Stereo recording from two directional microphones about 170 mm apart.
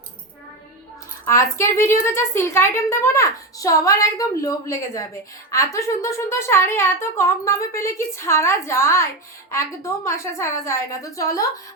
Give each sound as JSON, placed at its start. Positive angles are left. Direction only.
{"t": 1.2, "sound": "a woman's voice", "side_deg": 15}